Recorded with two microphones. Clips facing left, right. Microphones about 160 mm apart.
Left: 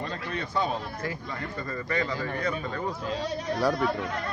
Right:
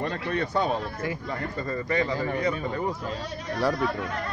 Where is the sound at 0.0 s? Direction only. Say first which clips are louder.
Right 5 dB; 55° right (ahead or behind).